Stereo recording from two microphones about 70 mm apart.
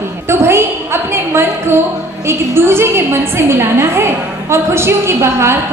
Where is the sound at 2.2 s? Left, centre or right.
Right.